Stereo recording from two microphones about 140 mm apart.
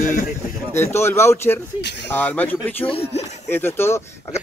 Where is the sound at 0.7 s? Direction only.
20° left (ahead or behind).